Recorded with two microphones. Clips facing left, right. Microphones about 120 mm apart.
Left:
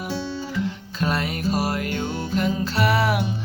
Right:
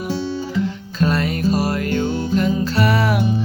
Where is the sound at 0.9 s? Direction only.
15° left (ahead or behind).